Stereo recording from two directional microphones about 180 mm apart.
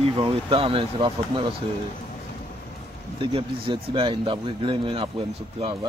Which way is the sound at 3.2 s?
30° right (ahead or behind).